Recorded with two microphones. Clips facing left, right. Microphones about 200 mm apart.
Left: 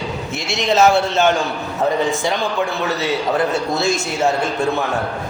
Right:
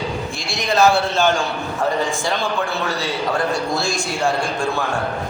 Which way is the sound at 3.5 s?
20° left (ahead or behind).